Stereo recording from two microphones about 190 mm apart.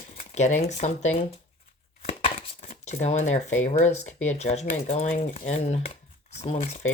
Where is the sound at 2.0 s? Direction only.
30° left (ahead or behind).